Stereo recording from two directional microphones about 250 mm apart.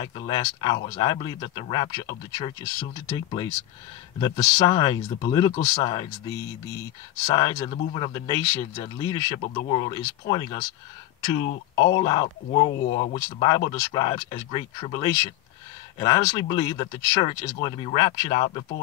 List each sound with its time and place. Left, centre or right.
0.0 s speech: centre
12.8 s speech: left
13.1 s speech: centre